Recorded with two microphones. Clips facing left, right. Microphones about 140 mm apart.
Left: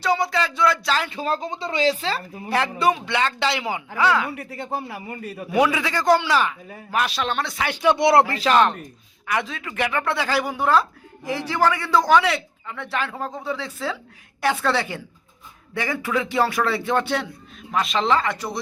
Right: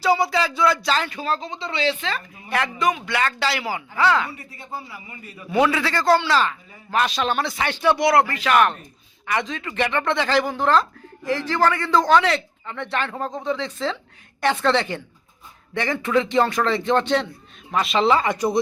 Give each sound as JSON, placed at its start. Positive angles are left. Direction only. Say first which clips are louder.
{"t": 0.0, "sound": "speech", "louder": "right 2 dB", "side_deg": -5}
{"t": 1.2, "sound": "speech", "louder": "left 1 dB", "side_deg": 45}
{"t": 1.7, "sound": "a woman's voice", "louder": "left 2 dB", "side_deg": 35}
{"t": 4.3, "sound": "a man's voice", "louder": "left 6 dB", "side_deg": 65}
{"t": 5.5, "sound": "a man's voice", "louder": "right 1 dB", "side_deg": 10}
{"t": 7.7, "sound": "a man's voice", "louder": "left 1 dB", "side_deg": 10}
{"t": 7.9, "sound": "a woman's voice", "louder": "left 1 dB", "side_deg": 25}
{"t": 9.2, "sound": "a man's voice", "louder": "right 1 dB", "side_deg": 5}
{"t": 18.2, "sound": "speech", "louder": "right 5 dB", "side_deg": -20}